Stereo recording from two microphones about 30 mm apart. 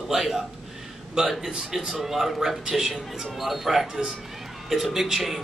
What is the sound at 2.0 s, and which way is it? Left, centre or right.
Speech, centre.